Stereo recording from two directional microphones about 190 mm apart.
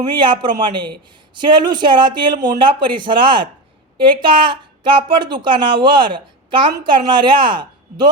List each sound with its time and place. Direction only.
0.1 s a woman's voice: 25° right (ahead or behind)